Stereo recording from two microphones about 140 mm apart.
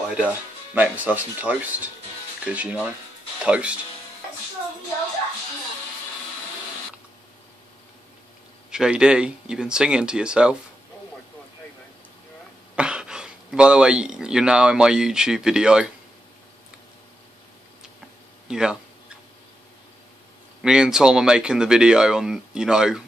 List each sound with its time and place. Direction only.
0.7 s a man's voice: 10° right (ahead or behind)
8.6 s a man's voice: 5° right (ahead or behind)
12.7 s speech: 5° right (ahead or behind)
18.5 s speech: 5° right (ahead or behind)
20.6 s speech: 5° right (ahead or behind)